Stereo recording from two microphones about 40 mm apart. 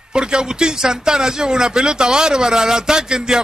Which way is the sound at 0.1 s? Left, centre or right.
Centre.